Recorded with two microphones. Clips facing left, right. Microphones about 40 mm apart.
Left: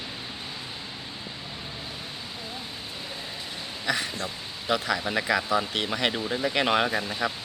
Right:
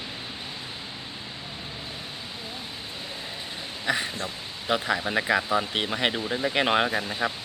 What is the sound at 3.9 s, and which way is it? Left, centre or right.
Speech, centre.